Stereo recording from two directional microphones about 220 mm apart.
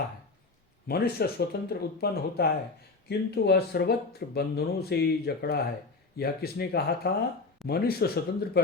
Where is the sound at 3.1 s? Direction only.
45° left (ahead or behind).